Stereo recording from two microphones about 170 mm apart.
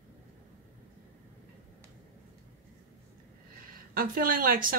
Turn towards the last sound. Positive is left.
turn(degrees=-55)  # may be behind; listen again after turning